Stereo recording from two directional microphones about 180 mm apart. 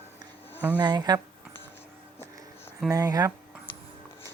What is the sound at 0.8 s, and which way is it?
Speech, 25° right (ahead or behind).